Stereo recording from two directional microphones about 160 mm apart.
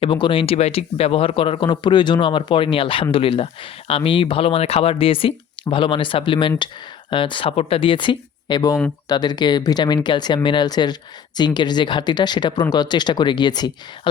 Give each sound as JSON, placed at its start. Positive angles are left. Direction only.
{"t": 0.0, "sound": "speech", "side_deg": 30}